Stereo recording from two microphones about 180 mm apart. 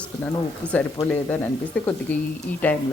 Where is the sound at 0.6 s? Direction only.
10° right (ahead or behind).